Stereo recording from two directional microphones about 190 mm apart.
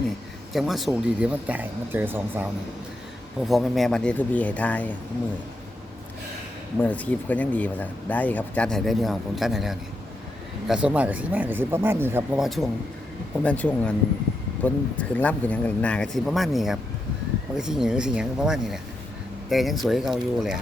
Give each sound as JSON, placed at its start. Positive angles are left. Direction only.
{"t": 0.5, "sound": "speech", "side_deg": 0}
{"t": 3.4, "sound": "speech", "side_deg": 0}
{"t": 6.7, "sound": "speech", "side_deg": 10}
{"t": 12.4, "sound": "speech", "side_deg": 0}